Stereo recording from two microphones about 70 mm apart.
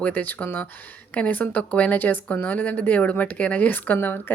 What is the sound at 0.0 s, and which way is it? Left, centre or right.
A woman's voice, left.